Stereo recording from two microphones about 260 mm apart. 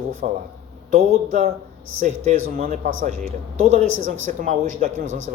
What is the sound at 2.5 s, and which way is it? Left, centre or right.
Speech, right.